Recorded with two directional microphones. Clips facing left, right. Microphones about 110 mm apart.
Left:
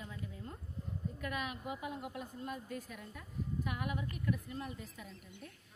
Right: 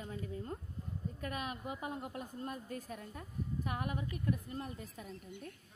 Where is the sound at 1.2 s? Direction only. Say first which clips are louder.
Even; 35° right (ahead or behind).